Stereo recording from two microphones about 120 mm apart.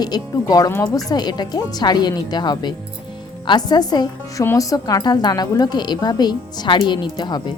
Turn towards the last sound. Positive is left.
turn(degrees=35)  # may be behind; listen again after turning